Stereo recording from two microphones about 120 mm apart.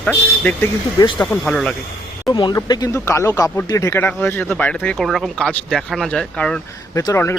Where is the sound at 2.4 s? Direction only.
35° left (ahead or behind).